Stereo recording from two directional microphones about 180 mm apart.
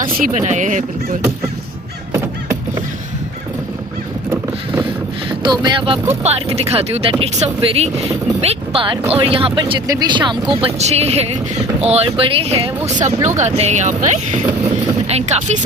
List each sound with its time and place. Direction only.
0.3 s speech: 40° right (ahead or behind)
2.1 s a sound: 15° right (ahead or behind)
5.4 s speech: 25° right (ahead or behind)